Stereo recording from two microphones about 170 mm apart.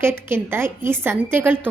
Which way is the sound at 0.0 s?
15° right (ahead or behind).